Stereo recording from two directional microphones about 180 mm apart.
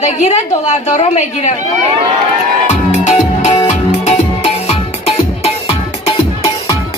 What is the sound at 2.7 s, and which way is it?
Music, 40° left (ahead or behind).